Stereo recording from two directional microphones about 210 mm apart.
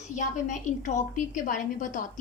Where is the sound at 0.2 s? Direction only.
35° left (ahead or behind).